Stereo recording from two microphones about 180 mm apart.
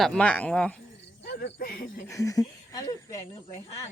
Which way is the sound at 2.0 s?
20° left (ahead or behind).